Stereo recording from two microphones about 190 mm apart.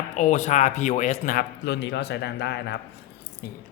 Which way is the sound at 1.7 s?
65° left (ahead or behind).